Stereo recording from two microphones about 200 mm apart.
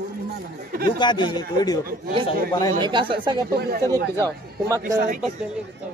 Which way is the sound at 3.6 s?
50° right (ahead or behind).